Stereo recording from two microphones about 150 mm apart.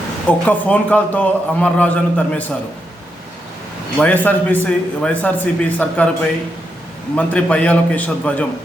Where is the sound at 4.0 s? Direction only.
10° left (ahead or behind).